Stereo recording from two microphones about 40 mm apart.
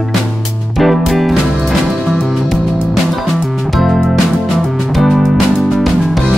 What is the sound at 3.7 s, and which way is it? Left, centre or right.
Music, centre.